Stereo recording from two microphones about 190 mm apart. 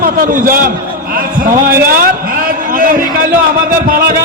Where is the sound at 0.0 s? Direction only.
45° right (ahead or behind).